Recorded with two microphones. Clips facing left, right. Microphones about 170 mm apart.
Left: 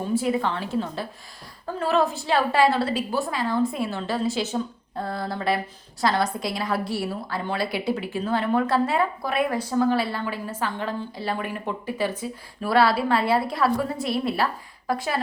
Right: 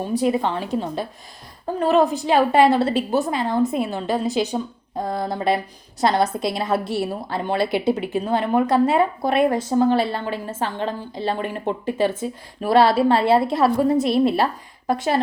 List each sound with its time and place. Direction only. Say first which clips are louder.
0.2 s a woman's voice: right 4 dB; 20° right (ahead or behind)